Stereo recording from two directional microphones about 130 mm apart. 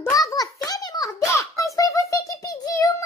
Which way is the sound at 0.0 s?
25° left (ahead or behind).